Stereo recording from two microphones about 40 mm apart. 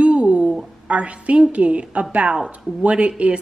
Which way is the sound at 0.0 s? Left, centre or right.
Right.